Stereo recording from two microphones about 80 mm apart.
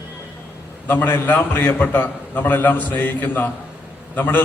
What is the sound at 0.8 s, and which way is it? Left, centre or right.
A man's voice, left.